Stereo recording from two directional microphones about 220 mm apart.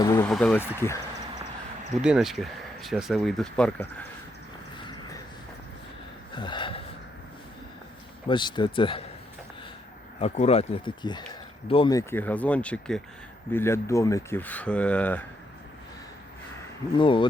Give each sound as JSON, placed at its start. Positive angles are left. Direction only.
{"t": 0.0, "sound": "vehicle", "side_deg": 15}
{"t": 0.3, "sound": "speech", "side_deg": 5}
{"t": 2.0, "sound": "speech", "side_deg": -5}
{"t": 6.3, "sound": "gasp", "side_deg": 20}
{"t": 8.3, "sound": "speech", "side_deg": 20}
{"t": 10.2, "sound": "speech", "side_deg": 30}
{"t": 17.0, "sound": "speech", "side_deg": 25}